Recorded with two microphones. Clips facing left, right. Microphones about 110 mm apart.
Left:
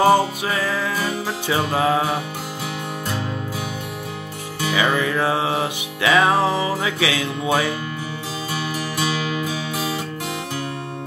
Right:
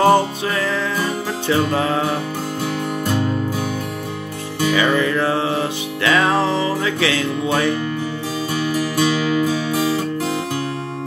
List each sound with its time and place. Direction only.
0.0 s music: 10° left (ahead or behind)
4.7 s music: 10° left (ahead or behind)
8.7 s music: 40° right (ahead or behind)